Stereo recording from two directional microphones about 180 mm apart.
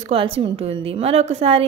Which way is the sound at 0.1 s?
30° right (ahead or behind).